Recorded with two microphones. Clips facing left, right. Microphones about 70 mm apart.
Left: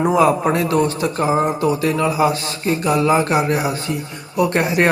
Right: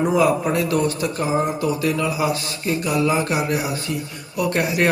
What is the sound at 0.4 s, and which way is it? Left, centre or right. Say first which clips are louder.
A man's voice: left 3 dB; left.